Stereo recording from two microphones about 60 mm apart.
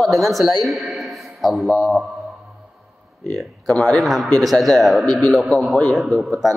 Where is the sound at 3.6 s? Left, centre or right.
Centre.